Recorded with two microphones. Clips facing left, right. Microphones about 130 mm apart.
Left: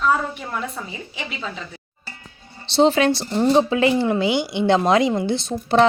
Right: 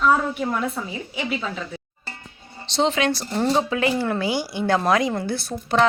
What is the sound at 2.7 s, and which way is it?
Speech, 35° left (ahead or behind).